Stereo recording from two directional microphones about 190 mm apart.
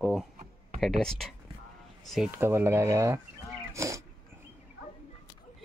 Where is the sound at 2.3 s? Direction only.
10° right (ahead or behind).